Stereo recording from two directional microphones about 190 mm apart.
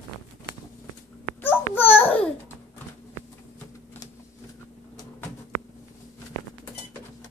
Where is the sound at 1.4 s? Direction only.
10° left (ahead or behind).